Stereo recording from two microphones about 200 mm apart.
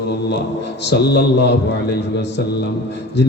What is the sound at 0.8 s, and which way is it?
A man's voice, 60° left (ahead or behind).